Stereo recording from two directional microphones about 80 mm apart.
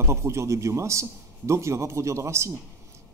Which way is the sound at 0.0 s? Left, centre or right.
Right.